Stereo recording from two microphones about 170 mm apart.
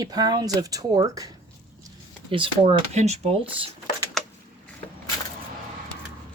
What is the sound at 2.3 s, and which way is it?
Speech, 30° right (ahead or behind).